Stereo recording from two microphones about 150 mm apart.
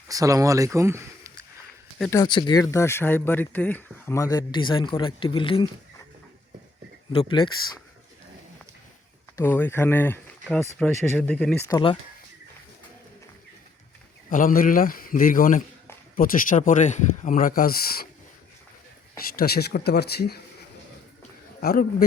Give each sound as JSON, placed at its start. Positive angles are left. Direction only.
{"t": 0.1, "sound": "speech", "side_deg": -20}
{"t": 2.2, "sound": "speech", "side_deg": 30}
{"t": 7.1, "sound": "speech", "side_deg": 30}
{"t": 9.3, "sound": "speech", "side_deg": 15}
{"t": 11.7, "sound": "speech", "side_deg": 30}
{"t": 14.3, "sound": "a man's voice", "side_deg": 65}
{"t": 19.1, "sound": "speech", "side_deg": 85}
{"t": 21.6, "sound": "a man's voice", "side_deg": 85}